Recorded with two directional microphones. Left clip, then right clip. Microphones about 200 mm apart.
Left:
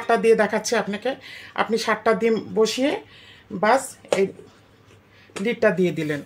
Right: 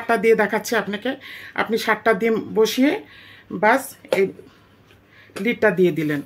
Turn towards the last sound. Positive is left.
turn(degrees=-45)  # may be behind; listen again after turning